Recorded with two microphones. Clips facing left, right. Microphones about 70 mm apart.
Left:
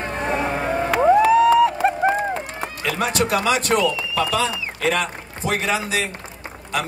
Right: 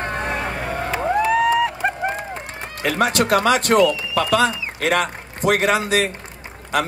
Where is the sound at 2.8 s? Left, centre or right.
Right.